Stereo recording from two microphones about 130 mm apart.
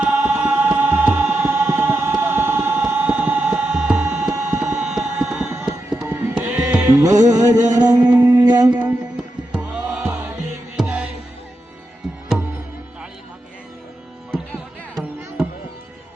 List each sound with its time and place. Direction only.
0.0 s music: 10° right (ahead or behind)
6.0 s music: 20° right (ahead or behind)
6.5 s music: 10° right (ahead or behind)
6.8 s music: 25° right (ahead or behind)
9.1 s music: 10° right (ahead or behind)
14.3 s music: centre (ahead or behind)